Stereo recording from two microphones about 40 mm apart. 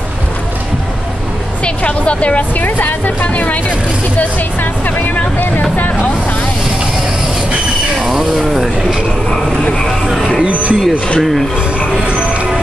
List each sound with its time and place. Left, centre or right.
1.6 s speech: left
2.6 s speech: left
4.8 s speech: left
8.0 s a sound: centre
10.4 s speech: right
11.1 s speech: centre